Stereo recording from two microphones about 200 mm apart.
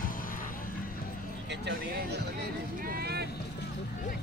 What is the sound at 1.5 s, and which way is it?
Speech, 55° right (ahead or behind).